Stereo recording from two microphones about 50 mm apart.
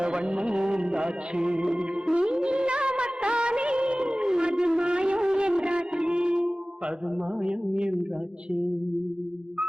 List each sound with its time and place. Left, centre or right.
0.0 s music: centre
2.1 s music of bollywood: centre
7.4 s a sound: centre